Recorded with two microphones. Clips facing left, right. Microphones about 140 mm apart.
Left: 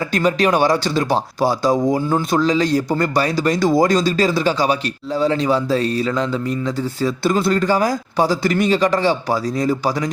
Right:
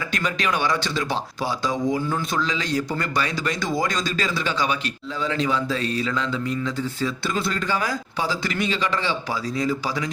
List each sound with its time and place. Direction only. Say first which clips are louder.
0.1 s speech: left 9 dB; 35° left (ahead or behind)